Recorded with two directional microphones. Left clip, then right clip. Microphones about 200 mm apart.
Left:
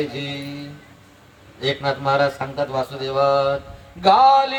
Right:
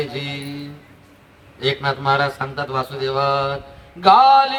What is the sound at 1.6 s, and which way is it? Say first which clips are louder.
A man's voice: right 2 dB; 20° right (ahead or behind).